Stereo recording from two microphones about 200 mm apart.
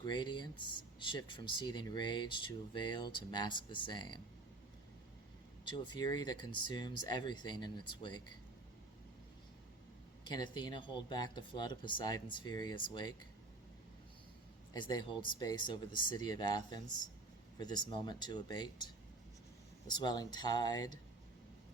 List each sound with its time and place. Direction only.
0.0 s speech: 20° left (ahead or behind)
5.6 s speech: 20° left (ahead or behind)
10.2 s speech: 20° left (ahead or behind)
14.7 s speech: 20° left (ahead or behind)
19.9 s speech: 20° left (ahead or behind)